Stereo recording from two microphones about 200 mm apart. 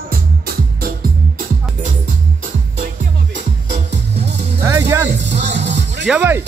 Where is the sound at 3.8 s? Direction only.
55° right (ahead or behind).